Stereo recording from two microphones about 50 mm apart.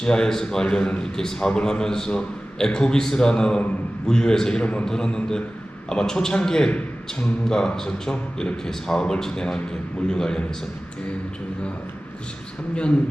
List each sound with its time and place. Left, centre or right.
0.0 s a man's voice: centre